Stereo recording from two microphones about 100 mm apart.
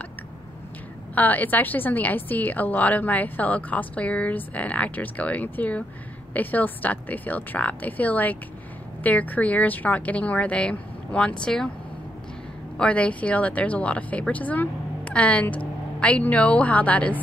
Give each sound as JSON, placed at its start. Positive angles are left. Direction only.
{"t": 1.1, "sound": "a woman's voice", "side_deg": 15}
{"t": 12.7, "sound": "a woman's voice", "side_deg": 10}